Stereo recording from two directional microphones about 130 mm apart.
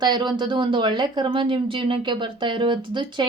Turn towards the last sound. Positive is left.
turn(degrees=-35)  # may be behind; listen again after turning